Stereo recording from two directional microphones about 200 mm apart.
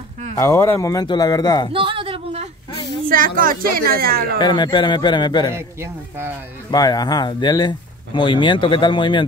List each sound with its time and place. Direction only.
0.4 s speech: 15° left (ahead or behind)
1.7 s a sound: 25° right (ahead or behind)
3.1 s a woman's voice: 45° right (ahead or behind)
4.4 s speech: 20° left (ahead or behind)
5.5 s speech: 15° right (ahead or behind)
6.7 s speech: 20° left (ahead or behind)